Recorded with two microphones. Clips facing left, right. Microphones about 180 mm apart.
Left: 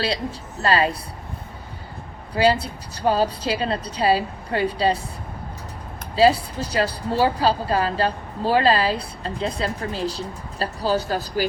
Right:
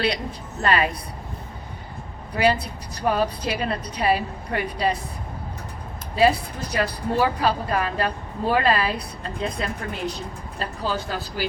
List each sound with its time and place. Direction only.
0.0 s a woman's voice: 30° left (ahead or behind)
2.3 s a woman's voice: 30° left (ahead or behind)
6.1 s a woman's voice: 30° left (ahead or behind)